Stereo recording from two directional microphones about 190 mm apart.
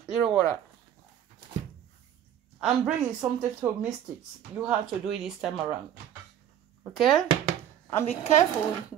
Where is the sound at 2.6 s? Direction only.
5° right (ahead or behind).